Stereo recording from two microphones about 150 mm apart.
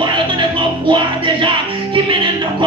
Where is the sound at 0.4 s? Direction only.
35° right (ahead or behind).